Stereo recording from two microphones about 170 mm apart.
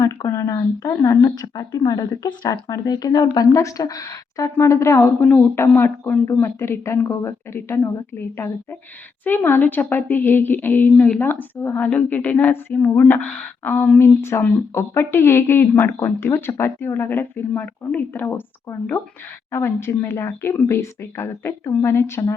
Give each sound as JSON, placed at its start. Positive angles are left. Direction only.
{"t": 0.0, "sound": "a woman's voice", "side_deg": 15}